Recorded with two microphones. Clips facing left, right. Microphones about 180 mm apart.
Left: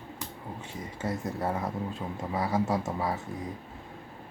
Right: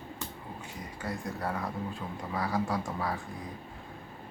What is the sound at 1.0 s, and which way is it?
A man's voice, 25° left (ahead or behind).